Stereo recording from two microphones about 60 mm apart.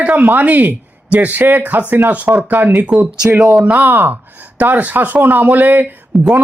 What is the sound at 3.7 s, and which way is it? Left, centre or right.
Speech, right.